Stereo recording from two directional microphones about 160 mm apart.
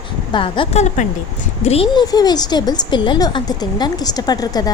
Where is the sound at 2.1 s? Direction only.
25° left (ahead or behind).